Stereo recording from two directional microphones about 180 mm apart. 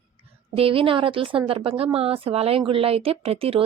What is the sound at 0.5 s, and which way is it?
A woman's voice, 30° right (ahead or behind).